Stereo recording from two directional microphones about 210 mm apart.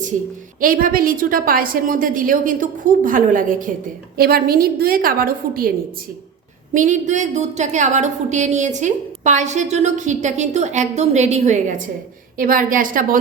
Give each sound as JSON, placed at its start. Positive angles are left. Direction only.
{"t": 0.6, "sound": "a woman's voice", "side_deg": -40}
{"t": 6.7, "sound": "a woman's voice", "side_deg": -35}